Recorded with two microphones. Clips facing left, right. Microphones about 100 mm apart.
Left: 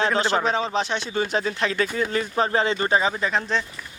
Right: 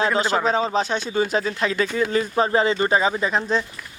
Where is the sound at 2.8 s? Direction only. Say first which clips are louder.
Right 2 dB; 20° right (ahead or behind).